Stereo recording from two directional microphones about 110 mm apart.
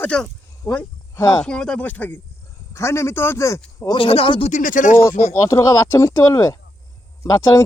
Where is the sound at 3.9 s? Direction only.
55° left (ahead or behind).